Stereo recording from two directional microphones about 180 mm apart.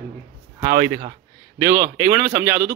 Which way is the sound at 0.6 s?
20° right (ahead or behind).